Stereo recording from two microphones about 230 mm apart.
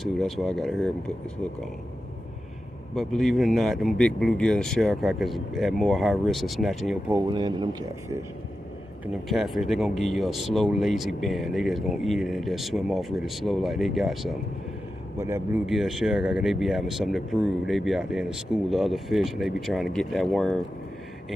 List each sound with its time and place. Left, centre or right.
0.0 s speech: centre
2.9 s speech: centre
7.2 s speech: centre
9.0 s speech: centre
15.1 s speech: centre